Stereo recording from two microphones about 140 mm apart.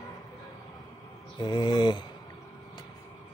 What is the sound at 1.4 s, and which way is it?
Speech, 30° left (ahead or behind).